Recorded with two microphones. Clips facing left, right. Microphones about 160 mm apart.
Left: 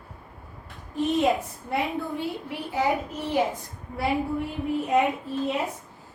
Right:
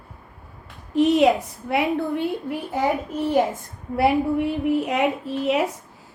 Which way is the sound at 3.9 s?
70° right (ahead or behind).